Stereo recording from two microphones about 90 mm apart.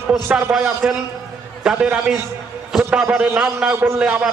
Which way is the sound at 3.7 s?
30° right (ahead or behind).